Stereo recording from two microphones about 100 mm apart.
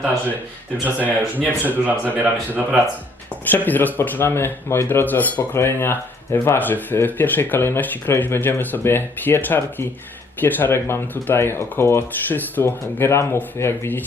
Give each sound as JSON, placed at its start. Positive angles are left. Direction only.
{"t": 0.9, "sound": "speech", "side_deg": -15}
{"t": 3.5, "sound": "speech", "side_deg": 20}